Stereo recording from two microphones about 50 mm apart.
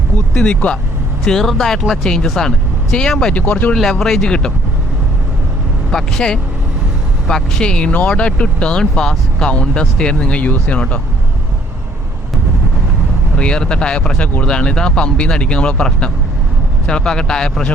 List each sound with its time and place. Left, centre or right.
0.4 s speech: centre
3.3 s speech: left
3.9 s speech: centre
5.9 s speech: centre; by 11.0 s left
13.3 s speech: centre